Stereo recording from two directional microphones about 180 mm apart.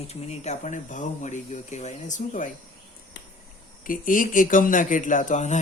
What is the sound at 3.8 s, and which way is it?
Speech, 50° left (ahead or behind).